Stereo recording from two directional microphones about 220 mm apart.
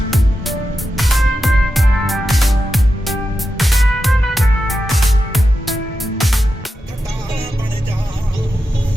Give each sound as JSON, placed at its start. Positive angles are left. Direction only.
{"t": 0.1, "sound": "music", "side_deg": 0}